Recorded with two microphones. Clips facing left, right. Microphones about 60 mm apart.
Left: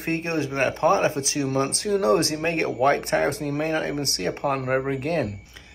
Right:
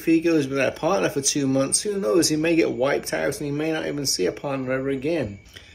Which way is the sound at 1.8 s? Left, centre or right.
Left.